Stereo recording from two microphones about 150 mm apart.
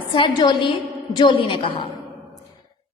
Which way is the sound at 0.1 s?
30° left (ahead or behind).